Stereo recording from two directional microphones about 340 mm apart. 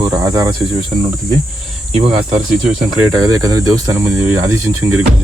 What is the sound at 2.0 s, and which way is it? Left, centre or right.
Speech, centre.